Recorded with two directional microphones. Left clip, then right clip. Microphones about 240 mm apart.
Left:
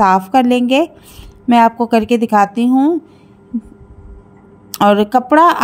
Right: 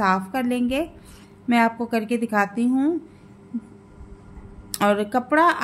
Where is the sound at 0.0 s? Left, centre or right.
Left.